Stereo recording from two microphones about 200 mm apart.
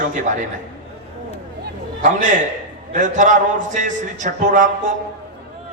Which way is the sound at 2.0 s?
40° right (ahead or behind).